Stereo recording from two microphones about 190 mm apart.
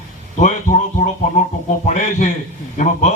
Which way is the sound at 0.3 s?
40° left (ahead or behind).